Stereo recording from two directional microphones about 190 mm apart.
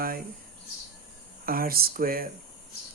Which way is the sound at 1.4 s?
50° right (ahead or behind).